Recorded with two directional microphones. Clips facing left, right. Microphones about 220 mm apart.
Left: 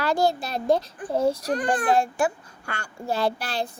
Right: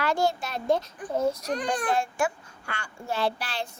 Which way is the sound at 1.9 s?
35° left (ahead or behind).